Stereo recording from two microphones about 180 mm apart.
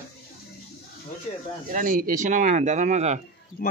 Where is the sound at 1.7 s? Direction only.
50° right (ahead or behind).